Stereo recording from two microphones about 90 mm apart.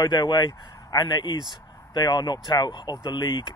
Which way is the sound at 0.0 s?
55° left (ahead or behind).